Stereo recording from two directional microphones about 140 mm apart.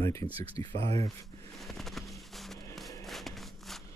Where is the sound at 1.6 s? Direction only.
Centre (ahead or behind).